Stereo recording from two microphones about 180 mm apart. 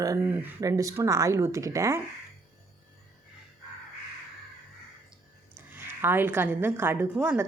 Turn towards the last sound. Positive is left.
turn(degrees=-10)  # may be behind; listen again after turning